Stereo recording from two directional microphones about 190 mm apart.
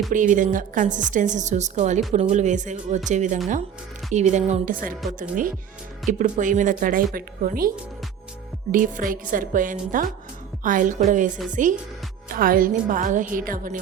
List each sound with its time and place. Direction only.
0.1 s a woman's voice: 40° right (ahead or behind)
6.1 s speech: 40° right (ahead or behind)
8.7 s speech: 45° right (ahead or behind)